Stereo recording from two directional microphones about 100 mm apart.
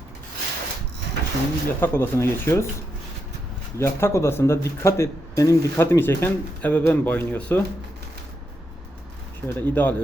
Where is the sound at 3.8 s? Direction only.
25° left (ahead or behind).